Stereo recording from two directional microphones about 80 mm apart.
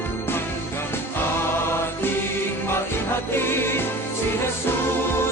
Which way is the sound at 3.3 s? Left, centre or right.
Left.